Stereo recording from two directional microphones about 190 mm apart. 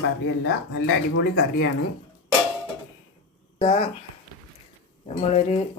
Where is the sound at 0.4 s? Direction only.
85° left.